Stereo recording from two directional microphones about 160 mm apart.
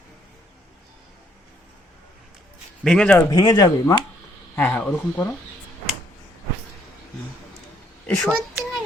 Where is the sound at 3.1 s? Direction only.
25° left (ahead or behind).